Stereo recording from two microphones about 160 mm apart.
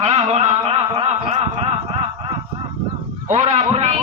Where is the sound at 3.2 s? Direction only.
45° right (ahead or behind).